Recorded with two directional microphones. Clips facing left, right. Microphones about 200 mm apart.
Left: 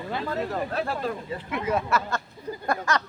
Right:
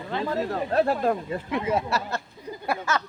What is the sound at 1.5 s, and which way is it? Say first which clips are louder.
Speech: even; 30° right (ahead or behind).